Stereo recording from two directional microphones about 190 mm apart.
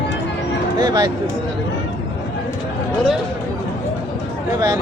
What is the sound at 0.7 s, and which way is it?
Speech, 20° right (ahead or behind).